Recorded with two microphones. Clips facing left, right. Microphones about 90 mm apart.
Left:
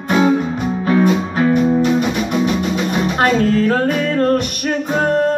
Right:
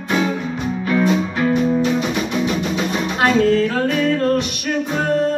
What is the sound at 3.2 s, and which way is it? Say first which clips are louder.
Music: right 1 dB; 45° left (ahead or behind).